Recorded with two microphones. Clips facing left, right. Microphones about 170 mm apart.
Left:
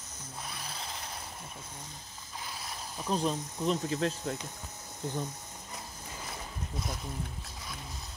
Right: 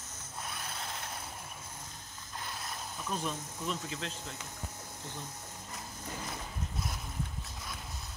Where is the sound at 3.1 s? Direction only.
35° left (ahead or behind).